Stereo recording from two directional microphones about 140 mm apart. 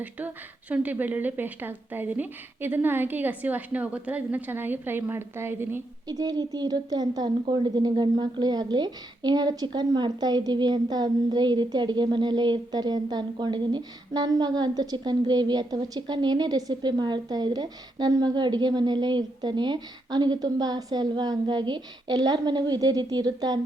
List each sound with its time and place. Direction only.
0.7 s a woman's voice: 10° right (ahead or behind)
6.1 s a woman's voice: 30° right (ahead or behind)